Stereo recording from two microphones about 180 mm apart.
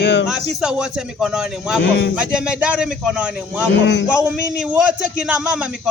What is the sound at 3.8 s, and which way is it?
Speech, 75° left (ahead or behind).